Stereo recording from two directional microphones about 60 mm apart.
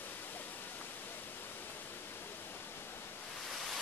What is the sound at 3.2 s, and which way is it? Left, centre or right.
Waves, centre.